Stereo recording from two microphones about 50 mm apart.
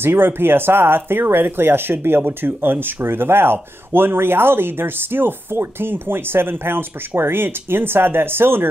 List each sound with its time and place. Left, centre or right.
0.0 s speech: right